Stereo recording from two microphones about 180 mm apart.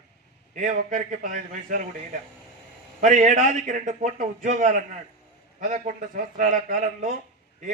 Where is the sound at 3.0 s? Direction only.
45° right (ahead or behind).